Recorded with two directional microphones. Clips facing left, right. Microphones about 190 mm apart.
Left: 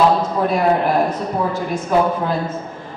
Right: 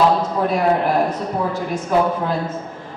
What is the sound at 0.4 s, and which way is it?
A man's voice, 15° left (ahead or behind).